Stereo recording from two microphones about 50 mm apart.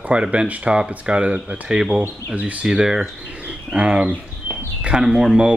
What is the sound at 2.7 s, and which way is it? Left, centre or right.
Speech, centre.